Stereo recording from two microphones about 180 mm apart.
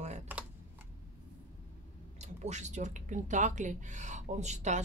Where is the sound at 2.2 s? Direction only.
40° right (ahead or behind).